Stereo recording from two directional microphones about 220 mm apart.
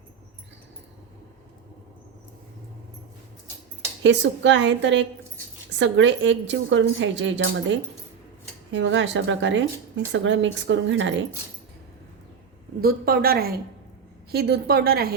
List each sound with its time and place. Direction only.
4.0 s a woman's voice: 55° right (ahead or behind)
12.8 s a woman's voice: 45° right (ahead or behind)